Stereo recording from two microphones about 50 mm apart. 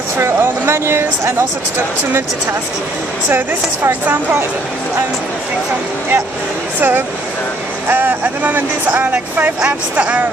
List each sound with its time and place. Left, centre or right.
0.4 s speech: right
4.1 s speech: right
6.8 s speech: right